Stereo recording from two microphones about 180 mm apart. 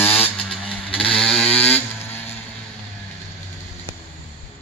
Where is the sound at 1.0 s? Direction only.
30° left (ahead or behind).